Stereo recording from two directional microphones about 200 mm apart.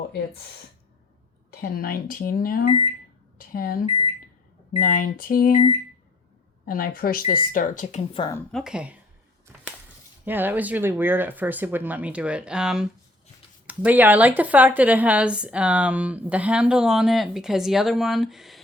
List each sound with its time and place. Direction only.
1.6 s speech: 50° left (ahead or behind)
6.7 s speech: 45° left (ahead or behind)
8.2 s speech: 20° left (ahead or behind)
8.5 s speech: 5° right (ahead or behind)
10.2 s speech: 10° right (ahead or behind)